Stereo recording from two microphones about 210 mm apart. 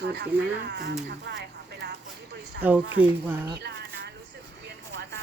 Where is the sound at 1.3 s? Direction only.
55° right (ahead or behind).